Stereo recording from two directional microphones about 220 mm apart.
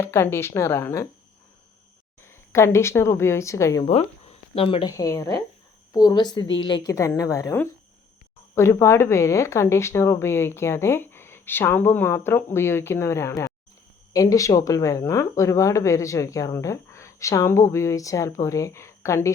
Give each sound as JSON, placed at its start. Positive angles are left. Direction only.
{"t": 0.0, "sound": "speech", "side_deg": 10}
{"t": 2.2, "sound": "speech", "side_deg": 10}
{"t": 3.8, "sound": "a woman's voice", "side_deg": 30}